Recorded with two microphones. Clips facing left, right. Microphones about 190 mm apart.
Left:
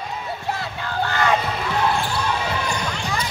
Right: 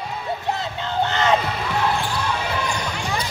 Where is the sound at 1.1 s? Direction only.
20° right (ahead or behind).